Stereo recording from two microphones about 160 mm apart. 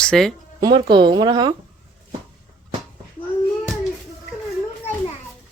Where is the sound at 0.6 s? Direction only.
25° right (ahead or behind).